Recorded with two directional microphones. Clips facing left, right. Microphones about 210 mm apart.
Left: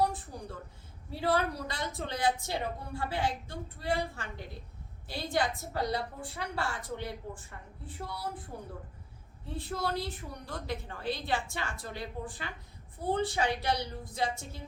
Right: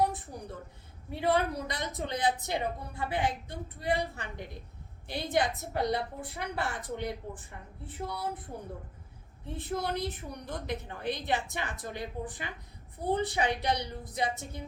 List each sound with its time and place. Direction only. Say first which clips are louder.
0.0 s a sound: right 1 dB; 20° right (ahead or behind)
1.1 s a woman's voice: right 2 dB; 20° right (ahead or behind)
9.5 s a woman's voice: right 1 dB; 20° right (ahead or behind)